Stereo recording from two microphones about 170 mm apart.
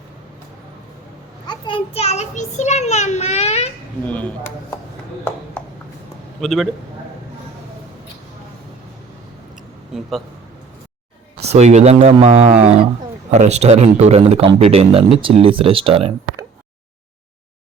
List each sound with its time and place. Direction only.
1.5 s a child's voice: 30° left (ahead or behind)
4.0 s speech: 10° left (ahead or behind)
6.4 s a man's voice: centre (ahead or behind)
9.6 s a sound: centre (ahead or behind)
11.4 s a man's voice: 40° right (ahead or behind)